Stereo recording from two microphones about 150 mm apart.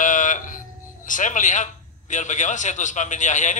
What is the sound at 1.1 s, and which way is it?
A man's voice, 60° left (ahead or behind).